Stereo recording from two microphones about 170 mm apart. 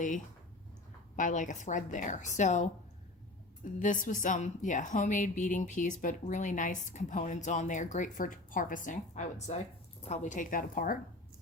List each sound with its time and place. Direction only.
1.1 s a woman's voice: 45° left (ahead or behind)
3.8 s a woman's voice: 50° left (ahead or behind)